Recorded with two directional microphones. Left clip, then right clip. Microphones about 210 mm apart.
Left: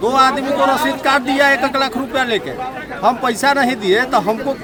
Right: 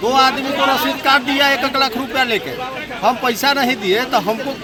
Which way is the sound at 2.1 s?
5° left (ahead or behind).